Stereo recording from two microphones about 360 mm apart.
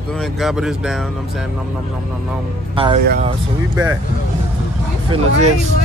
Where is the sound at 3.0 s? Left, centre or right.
Right.